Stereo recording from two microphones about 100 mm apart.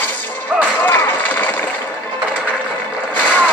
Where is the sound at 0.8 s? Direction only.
20° left (ahead or behind).